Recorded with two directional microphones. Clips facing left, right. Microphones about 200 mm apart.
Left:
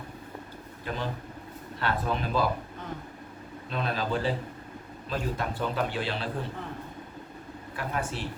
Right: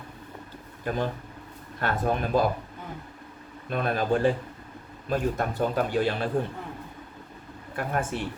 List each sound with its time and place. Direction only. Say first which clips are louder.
0.9 s a man's voice: right 5 dB; 50° right (ahead or behind)
3.7 s a man's voice: right 5 dB; 50° right (ahead or behind)
7.8 s a man's voice: right 4 dB; 50° right (ahead or behind)